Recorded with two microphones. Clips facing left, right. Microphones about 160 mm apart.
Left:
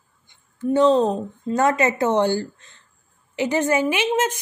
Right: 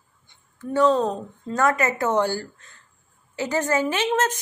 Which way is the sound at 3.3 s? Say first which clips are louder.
Left 3 dB; 20° left (ahead or behind).